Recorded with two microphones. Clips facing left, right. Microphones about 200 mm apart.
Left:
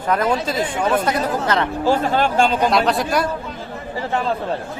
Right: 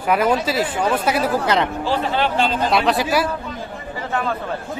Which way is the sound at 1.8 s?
45° left (ahead or behind).